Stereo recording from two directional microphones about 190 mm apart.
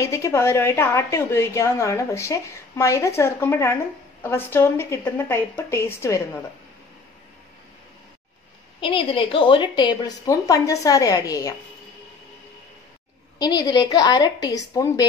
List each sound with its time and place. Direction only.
0.0 s a woman's voice: 15° left (ahead or behind)
8.8 s a woman's voice: 25° left (ahead or behind)
13.4 s a woman's voice: 20° left (ahead or behind)